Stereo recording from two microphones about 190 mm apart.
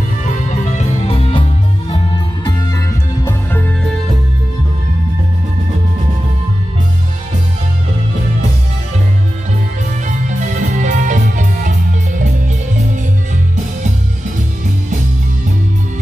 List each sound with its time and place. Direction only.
0.2 s music: 40° left (ahead or behind); by 2.8 s 25° left (ahead or behind)
10.0 s music: 40° right (ahead or behind)